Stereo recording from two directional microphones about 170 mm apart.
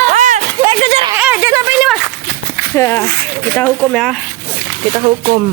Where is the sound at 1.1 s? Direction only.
10° right (ahead or behind).